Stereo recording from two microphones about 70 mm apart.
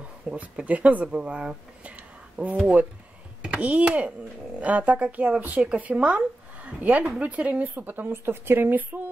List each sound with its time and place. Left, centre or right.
0.3 s a woman's voice: centre